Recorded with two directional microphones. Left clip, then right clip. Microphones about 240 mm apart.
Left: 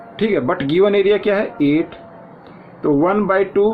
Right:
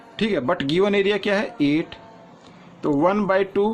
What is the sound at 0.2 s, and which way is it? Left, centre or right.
Speech, right.